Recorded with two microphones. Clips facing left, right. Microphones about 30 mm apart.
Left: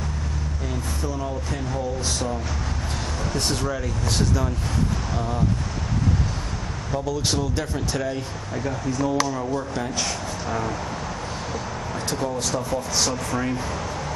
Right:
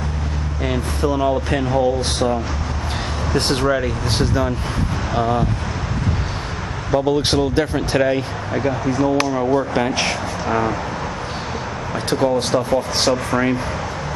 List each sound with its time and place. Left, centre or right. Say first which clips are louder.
0.7 s speech: right 10 dB; right
6.9 s speech: right 9 dB; right
12.1 s speech: right 9 dB; right